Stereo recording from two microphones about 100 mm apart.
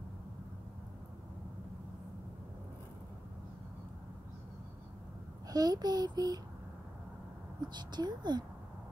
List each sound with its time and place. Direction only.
5.5 s a child's voice: 40° right (ahead or behind)
7.7 s speech: 45° right (ahead or behind)